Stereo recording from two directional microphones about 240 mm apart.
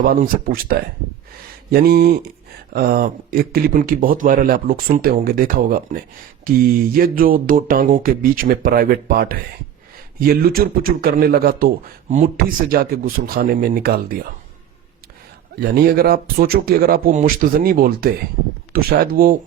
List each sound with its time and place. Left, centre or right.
0.0 s speech: right
15.5 s speech: right